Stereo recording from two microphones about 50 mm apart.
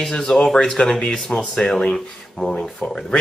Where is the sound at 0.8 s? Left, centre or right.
Left.